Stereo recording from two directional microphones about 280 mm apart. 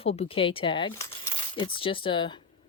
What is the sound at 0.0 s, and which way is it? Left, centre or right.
Speech, left.